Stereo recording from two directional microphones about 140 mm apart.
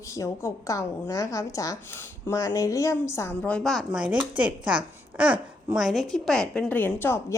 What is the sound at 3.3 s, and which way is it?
Speech, 10° left (ahead or behind).